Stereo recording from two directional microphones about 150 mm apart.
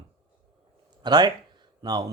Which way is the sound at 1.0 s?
30° right (ahead or behind).